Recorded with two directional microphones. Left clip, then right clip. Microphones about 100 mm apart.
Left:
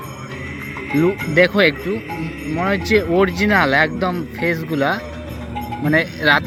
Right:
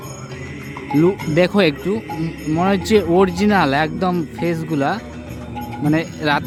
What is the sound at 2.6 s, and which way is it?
Speech, 65° right (ahead or behind).